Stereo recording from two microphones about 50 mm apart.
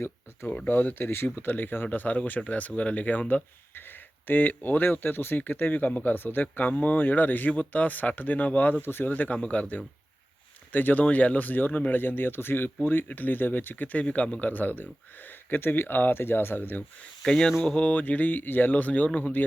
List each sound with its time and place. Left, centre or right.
0.7 s speech: left
8.8 s speech: left
11.0 s speech: left
14.0 s speech: left
17.2 s speech: centre
17.7 s a sound: left
17.9 s speech: left